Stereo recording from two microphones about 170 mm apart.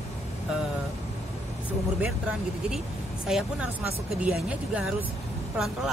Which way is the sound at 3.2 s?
5° right (ahead or behind).